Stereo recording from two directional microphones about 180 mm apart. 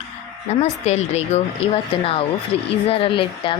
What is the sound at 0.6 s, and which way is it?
Speech, 40° left (ahead or behind).